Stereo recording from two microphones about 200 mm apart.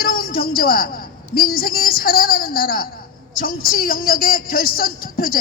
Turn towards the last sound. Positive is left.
turn(degrees=45)  # may be behind; listen again after turning